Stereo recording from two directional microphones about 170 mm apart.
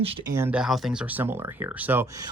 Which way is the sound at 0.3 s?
15° right (ahead or behind).